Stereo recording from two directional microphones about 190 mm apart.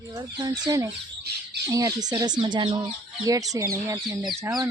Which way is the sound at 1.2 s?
60° right (ahead or behind).